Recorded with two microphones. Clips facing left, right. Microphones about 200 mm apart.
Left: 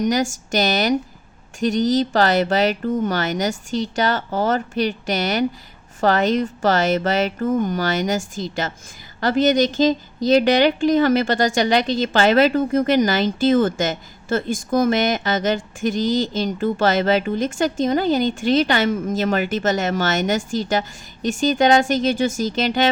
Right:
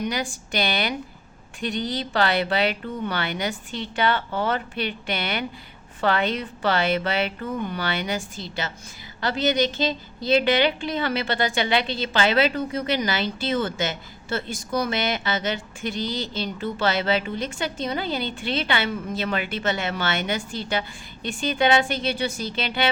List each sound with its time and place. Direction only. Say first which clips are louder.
0.0 s a woman's voice: left 8 dB; 45° left (ahead or behind)